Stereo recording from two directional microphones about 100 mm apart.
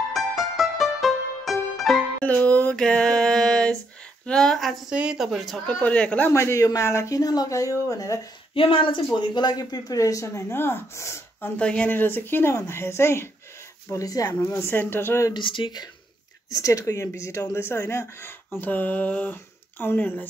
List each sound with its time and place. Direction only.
0.1 s music: centre (ahead or behind)
2.2 s a sound: 15° left (ahead or behind)
4.3 s speech: 5° left (ahead or behind)
5.7 s a sound: 15° left (ahead or behind)
6.3 s speech: 30° left (ahead or behind)
8.5 s speech: 60° left (ahead or behind); by 11.5 s 30° left (ahead or behind)
11.5 s speech: 10° left (ahead or behind)
15.3 s speech: 55° left (ahead or behind)
16.5 s speech: 35° left (ahead or behind)
18.6 s a sound: 20° left (ahead or behind)
19.8 s speech: 20° left (ahead or behind)